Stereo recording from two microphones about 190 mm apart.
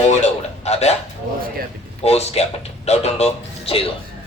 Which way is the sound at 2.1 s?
35° left (ahead or behind).